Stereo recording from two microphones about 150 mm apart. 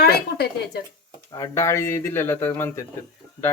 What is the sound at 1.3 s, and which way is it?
Speech, 20° left (ahead or behind).